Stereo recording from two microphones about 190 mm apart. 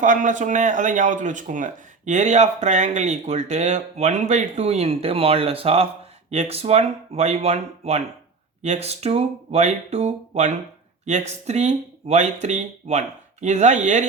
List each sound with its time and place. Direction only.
0.0 s speech: 40° right (ahead or behind)